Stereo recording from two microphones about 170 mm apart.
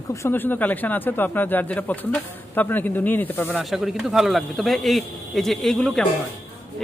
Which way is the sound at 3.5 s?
Centre (ahead or behind).